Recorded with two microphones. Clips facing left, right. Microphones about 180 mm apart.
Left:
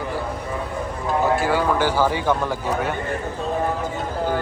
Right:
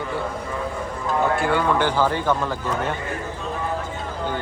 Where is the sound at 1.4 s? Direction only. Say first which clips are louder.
Even; 5° left (ahead or behind).